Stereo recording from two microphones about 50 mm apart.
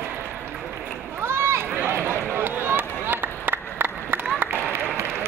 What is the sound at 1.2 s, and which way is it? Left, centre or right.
Run, right.